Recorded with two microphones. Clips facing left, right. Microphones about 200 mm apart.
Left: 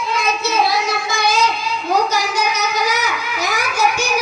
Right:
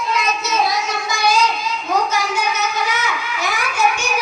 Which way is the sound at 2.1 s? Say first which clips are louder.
Left 1 dB; 40° left (ahead or behind).